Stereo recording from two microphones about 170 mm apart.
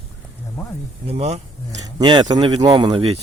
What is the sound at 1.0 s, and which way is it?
Speech, 35° right (ahead or behind).